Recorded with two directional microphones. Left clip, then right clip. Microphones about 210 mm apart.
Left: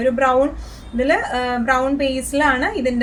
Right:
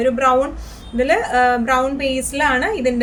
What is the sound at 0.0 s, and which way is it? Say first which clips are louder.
A woman's voice: right 1 dB; 40° right (ahead or behind).